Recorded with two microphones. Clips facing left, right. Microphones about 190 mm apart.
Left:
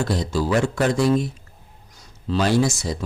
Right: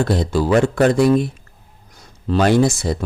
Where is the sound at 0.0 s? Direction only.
60° right (ahead or behind).